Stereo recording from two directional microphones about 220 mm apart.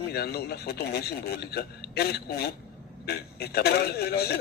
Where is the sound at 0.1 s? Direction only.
45° left (ahead or behind).